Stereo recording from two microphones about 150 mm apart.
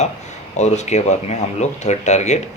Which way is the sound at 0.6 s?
50° left (ahead or behind).